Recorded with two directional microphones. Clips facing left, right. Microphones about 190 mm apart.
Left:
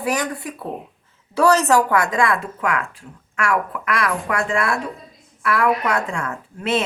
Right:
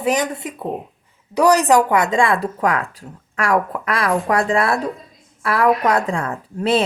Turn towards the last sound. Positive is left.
turn(degrees=-35)  # may be behind; listen again after turning